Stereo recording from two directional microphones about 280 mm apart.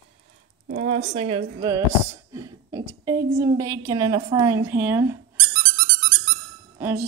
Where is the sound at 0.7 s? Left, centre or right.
Right; by 5.2 s centre.